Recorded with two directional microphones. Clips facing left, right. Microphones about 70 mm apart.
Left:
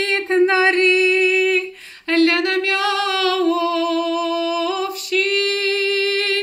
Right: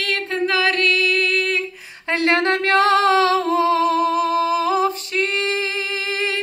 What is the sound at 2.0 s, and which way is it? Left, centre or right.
Singing, right.